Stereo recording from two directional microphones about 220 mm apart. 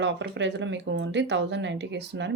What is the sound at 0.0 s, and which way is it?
Speech, 55° right (ahead or behind).